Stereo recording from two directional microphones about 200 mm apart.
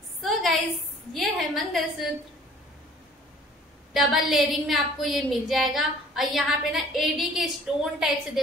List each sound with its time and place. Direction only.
0.2 s a sound: centre (ahead or behind)
1.1 s a woman's voice: centre (ahead or behind)
3.9 s a woman's voice: centre (ahead or behind)